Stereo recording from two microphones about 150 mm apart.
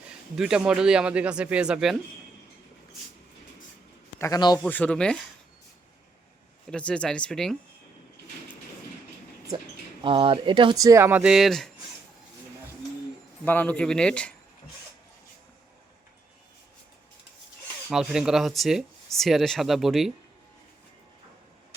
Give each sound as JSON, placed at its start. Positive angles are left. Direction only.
{"t": 0.1, "sound": "a man's voice", "side_deg": -5}
{"t": 4.2, "sound": "a man's voice", "side_deg": 25}
{"t": 4.7, "sound": "speech", "side_deg": 10}
{"t": 6.7, "sound": "speech", "side_deg": 5}
{"t": 10.0, "sound": "speech", "side_deg": -35}
{"t": 13.4, "sound": "speech", "side_deg": 15}
{"t": 17.9, "sound": "speech", "side_deg": -5}